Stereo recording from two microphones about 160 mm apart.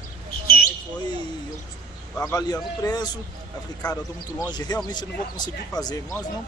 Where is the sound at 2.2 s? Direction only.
20° left (ahead or behind).